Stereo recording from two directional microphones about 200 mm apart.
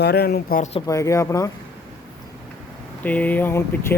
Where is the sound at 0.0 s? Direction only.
50° left (ahead or behind).